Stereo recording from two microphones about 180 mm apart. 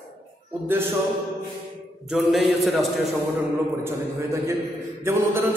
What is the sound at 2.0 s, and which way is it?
Speech, centre (ahead or behind).